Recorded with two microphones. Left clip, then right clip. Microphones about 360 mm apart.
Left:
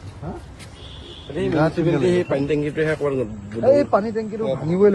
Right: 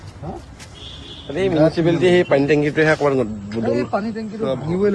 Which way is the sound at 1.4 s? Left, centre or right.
Right.